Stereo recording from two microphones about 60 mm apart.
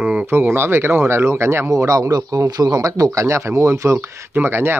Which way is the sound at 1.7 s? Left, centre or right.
Right.